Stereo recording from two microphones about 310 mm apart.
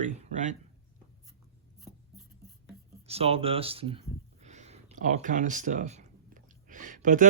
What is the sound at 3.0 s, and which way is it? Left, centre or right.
Speech, centre.